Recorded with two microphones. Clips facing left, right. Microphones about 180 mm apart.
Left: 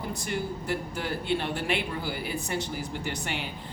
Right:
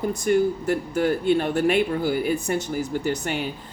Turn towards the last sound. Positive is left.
turn(degrees=-45)  # may be behind; listen again after turning